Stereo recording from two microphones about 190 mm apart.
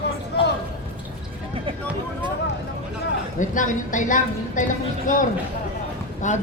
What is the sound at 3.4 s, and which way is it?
A woman's voice, 45° left (ahead or behind).